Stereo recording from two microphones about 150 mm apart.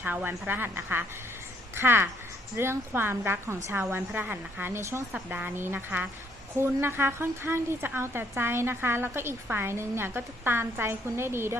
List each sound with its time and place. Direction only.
0.0 s a woman's voice: 10° right (ahead or behind)